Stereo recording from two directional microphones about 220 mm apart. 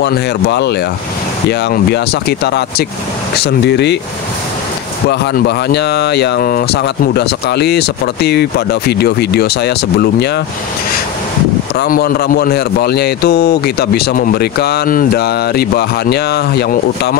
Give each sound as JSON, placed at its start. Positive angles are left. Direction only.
{"t": 0.0, "sound": "a man's voice", "side_deg": 50}
{"t": 5.1, "sound": "a man's voice", "side_deg": 50}
{"t": 11.7, "sound": "a man's voice", "side_deg": 45}